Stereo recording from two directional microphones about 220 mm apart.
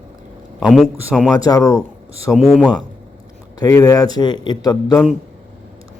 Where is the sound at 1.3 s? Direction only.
15° left (ahead or behind).